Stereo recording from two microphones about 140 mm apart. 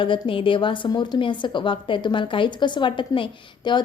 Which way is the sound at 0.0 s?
35° left (ahead or behind).